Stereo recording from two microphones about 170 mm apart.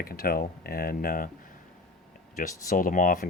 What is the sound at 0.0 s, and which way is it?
Speech, 60° left (ahead or behind).